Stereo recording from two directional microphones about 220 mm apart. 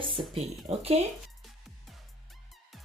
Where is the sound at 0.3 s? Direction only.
25° right (ahead or behind).